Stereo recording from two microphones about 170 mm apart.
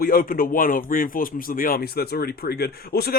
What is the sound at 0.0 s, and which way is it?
Speech, 55° left (ahead or behind).